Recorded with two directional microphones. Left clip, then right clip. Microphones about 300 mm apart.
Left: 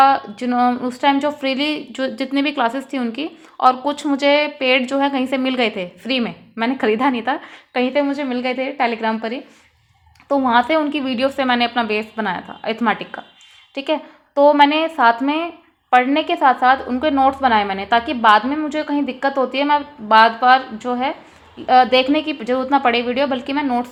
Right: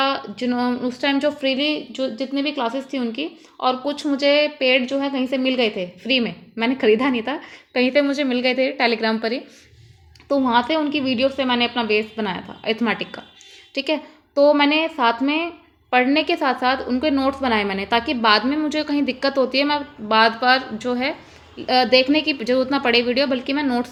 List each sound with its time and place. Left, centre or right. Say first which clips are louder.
0.0 s a woman's voice: left 8 dB; centre